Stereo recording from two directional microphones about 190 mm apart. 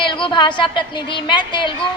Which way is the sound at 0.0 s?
25° left (ahead or behind).